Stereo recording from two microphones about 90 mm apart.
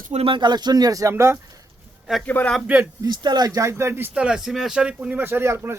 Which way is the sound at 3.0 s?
55° right (ahead or behind).